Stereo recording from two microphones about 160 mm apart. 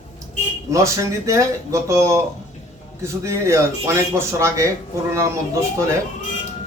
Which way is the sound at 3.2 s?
20° right (ahead or behind).